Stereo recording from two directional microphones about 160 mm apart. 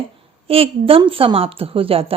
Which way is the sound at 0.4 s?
35° right (ahead or behind).